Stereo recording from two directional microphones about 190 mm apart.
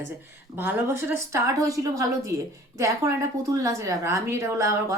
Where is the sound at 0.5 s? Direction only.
10° right (ahead or behind).